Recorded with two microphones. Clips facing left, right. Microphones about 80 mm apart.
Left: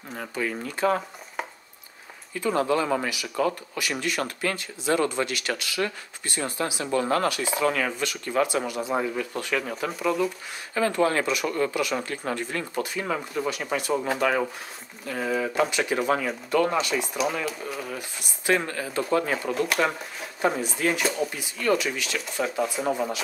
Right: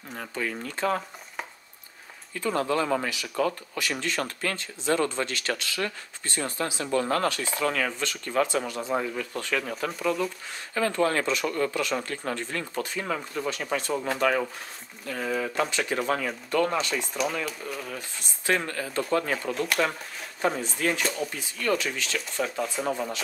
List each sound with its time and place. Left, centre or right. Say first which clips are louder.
0.2 s speech: left 2 dB; centre
2.4 s speech: left 2 dB; centre
10.7 s speech: left 2 dB; centre